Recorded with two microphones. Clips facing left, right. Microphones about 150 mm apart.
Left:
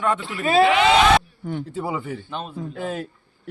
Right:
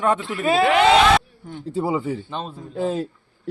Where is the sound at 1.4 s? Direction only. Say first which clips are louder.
Left 7 dB; 75° left (ahead or behind).